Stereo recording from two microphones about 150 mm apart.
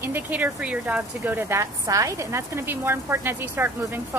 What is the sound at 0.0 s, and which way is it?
A woman's voice, 10° right (ahead or behind).